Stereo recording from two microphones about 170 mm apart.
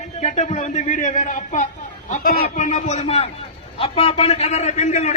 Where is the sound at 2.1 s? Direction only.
60° left (ahead or behind).